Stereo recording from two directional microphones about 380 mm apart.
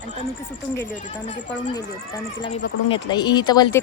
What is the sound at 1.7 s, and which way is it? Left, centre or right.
Speech, centre.